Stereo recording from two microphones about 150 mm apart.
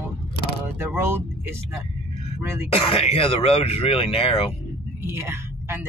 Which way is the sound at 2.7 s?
40° left (ahead or behind).